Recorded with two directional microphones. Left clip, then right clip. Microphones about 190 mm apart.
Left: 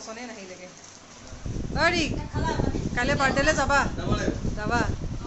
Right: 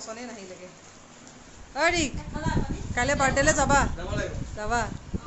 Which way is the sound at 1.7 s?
10° right (ahead or behind).